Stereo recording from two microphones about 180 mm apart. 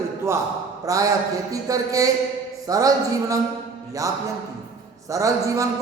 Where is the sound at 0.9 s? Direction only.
20° right (ahead or behind).